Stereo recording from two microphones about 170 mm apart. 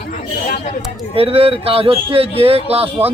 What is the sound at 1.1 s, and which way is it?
Speech, 35° right (ahead or behind).